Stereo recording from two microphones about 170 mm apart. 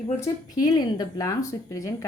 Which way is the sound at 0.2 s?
20° left (ahead or behind).